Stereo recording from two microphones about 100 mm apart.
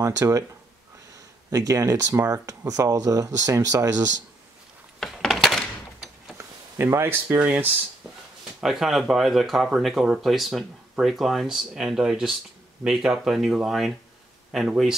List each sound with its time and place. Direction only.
0.0 s speech: 35° right (ahead or behind)
1.5 s speech: 35° right (ahead or behind)
5.0 s coin: centre (ahead or behind)
6.3 s speech: 25° right (ahead or behind)
8.5 s speech: 5° right (ahead or behind)